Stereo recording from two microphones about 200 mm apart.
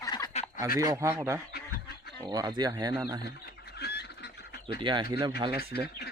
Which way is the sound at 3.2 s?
55° left (ahead or behind).